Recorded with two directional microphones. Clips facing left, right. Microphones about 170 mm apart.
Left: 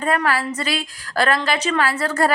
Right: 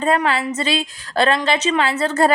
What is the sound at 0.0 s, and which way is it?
A woman's voice, 25° right (ahead or behind).